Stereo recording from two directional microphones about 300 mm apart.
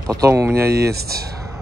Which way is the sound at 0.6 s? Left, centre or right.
Right.